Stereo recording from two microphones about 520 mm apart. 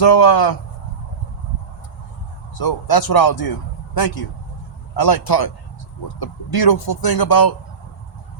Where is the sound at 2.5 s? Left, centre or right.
Left.